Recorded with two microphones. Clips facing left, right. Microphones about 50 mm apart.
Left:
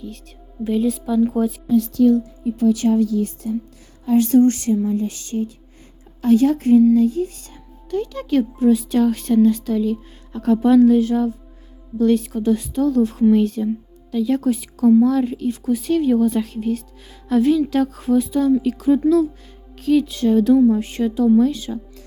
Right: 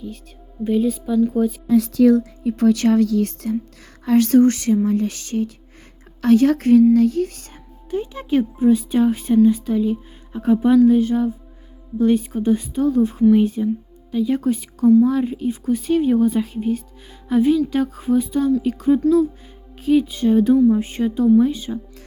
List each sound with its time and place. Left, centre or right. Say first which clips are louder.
0.6 s music: right 1 dB; centre
2.4 s speech: right 1 dB; right
4.0 s speech: even; right
6.9 s a sound: right 1 dB; right
7.9 s speech: left 1 dB; centre
17.7 s music: left 1 dB; centre
19.7 s speech: even; centre
20.7 s music: even; centre
21.3 s speech: even; centre